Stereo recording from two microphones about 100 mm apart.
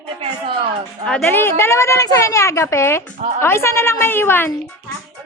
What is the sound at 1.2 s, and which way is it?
A woman's voice, 20° left (ahead or behind).